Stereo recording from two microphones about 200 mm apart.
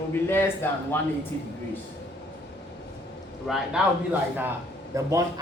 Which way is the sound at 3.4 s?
Centre (ahead or behind).